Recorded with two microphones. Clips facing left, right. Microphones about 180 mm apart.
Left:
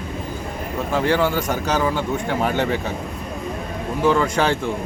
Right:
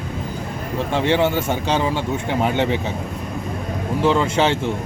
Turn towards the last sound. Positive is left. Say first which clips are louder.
# right 1 dB
turn(degrees=-25)  # may be behind; listen again after turning